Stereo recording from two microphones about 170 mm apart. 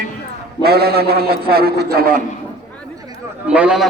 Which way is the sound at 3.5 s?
5° right (ahead or behind).